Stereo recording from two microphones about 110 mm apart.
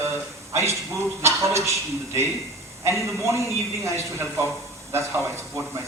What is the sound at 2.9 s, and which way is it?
A man's voice, 25° right (ahead or behind).